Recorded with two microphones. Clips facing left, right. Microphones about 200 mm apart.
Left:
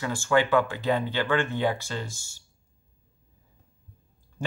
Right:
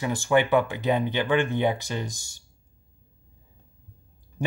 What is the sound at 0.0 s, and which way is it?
Speech, 20° right (ahead or behind).